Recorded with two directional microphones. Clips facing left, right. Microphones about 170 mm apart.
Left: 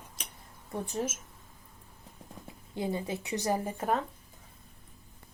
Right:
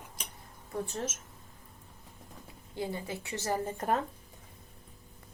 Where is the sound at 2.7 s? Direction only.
20° left (ahead or behind).